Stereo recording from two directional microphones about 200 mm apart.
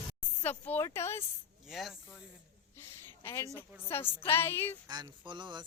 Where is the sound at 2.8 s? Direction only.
10° left (ahead or behind).